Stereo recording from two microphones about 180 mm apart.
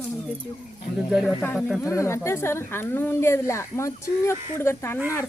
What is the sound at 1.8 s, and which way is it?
A woman's voice, 15° left (ahead or behind).